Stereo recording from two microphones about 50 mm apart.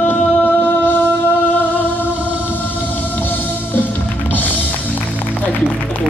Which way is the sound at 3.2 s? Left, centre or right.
Left.